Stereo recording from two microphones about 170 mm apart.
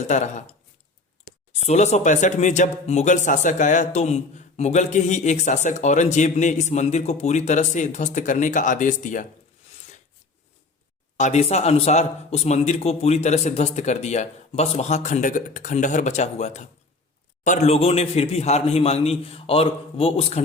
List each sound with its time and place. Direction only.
0.1 s speech: 45° left (ahead or behind)
1.6 s speech: 40° left (ahead or behind)
11.2 s speech: 40° left (ahead or behind)